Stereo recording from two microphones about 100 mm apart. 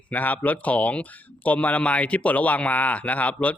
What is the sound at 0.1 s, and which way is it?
A man's voice, 15° left (ahead or behind).